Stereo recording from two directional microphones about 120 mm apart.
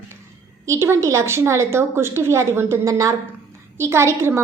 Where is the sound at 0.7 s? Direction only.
25° right (ahead or behind).